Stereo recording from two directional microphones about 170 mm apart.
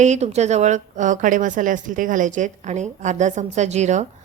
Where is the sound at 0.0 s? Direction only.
40° right (ahead or behind).